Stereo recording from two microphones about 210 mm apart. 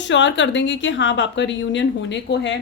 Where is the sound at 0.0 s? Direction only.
60° left (ahead or behind).